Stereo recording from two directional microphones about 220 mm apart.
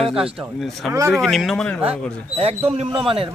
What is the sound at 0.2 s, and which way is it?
Speech, 5° right (ahead or behind).